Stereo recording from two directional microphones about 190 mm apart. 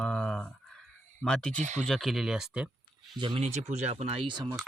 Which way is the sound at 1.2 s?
5° left (ahead or behind).